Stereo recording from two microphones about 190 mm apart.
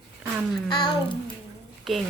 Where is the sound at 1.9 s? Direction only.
Centre (ahead or behind).